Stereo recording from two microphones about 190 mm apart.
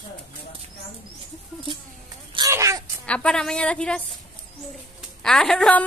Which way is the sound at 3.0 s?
5° left (ahead or behind).